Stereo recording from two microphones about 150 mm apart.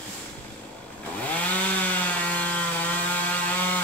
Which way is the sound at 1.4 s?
10° left (ahead or behind).